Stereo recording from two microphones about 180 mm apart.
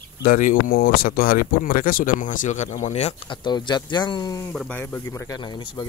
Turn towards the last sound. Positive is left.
turn(degrees=25)  # may be behind; listen again after turning